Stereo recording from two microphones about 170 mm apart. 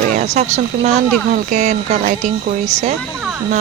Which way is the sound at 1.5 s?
45° right (ahead or behind).